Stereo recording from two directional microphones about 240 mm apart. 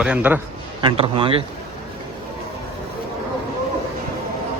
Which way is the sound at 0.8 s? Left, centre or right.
Right.